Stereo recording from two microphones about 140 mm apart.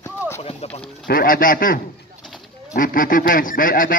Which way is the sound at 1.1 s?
90° left.